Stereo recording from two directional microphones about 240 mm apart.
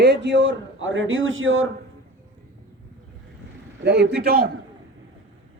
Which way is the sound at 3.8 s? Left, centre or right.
Right.